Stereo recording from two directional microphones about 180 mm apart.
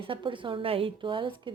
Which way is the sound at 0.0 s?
30° right (ahead or behind).